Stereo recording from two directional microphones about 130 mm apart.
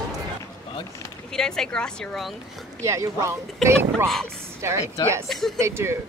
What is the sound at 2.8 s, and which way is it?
Speech, 25° right (ahead or behind).